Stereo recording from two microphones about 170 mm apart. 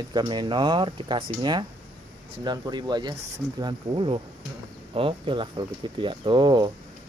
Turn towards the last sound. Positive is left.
turn(degrees=-25)  # may be behind; listen again after turning